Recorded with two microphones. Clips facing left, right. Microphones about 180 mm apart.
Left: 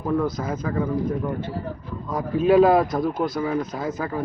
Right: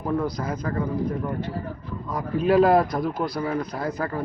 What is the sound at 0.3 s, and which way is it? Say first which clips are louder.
Speech: left 2 dB; 25° left (ahead or behind).